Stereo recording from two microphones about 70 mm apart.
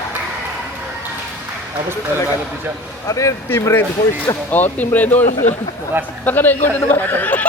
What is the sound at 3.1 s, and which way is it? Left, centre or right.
Speech, left.